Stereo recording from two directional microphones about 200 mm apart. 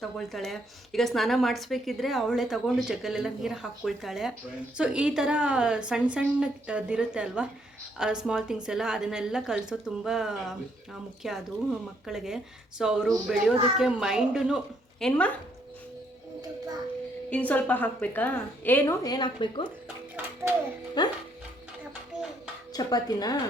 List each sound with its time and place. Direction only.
0.2 s a woman's voice: centre (ahead or behind)
17.2 s a woman's voice: 5° left (ahead or behind); by 19.6 s 25° left (ahead or behind)
20.1 s a sound: 10° right (ahead or behind)
21.0 s speech: 20° left (ahead or behind)
22.7 s speech: 20° left (ahead or behind)